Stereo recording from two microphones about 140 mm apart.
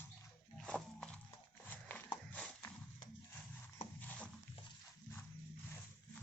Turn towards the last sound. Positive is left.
turn(degrees=10)  # may be behind; listen again after turning